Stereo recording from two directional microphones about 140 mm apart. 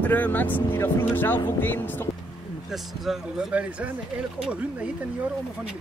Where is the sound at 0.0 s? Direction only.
10° left (ahead or behind).